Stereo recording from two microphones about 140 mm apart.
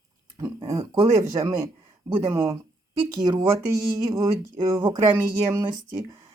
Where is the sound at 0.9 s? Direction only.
25° right (ahead or behind).